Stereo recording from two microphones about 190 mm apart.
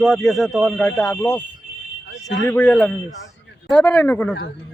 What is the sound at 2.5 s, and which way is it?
Speech, 5° left (ahead or behind).